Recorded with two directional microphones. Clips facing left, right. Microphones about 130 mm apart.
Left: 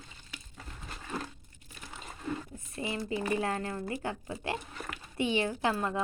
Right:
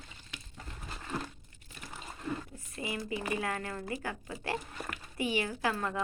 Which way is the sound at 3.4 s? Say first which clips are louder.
Left 3 dB; 30° left (ahead or behind).